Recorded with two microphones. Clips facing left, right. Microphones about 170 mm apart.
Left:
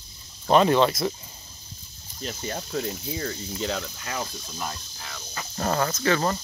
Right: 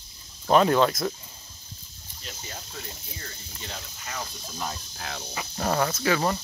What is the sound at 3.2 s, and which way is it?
Speech, 90° left.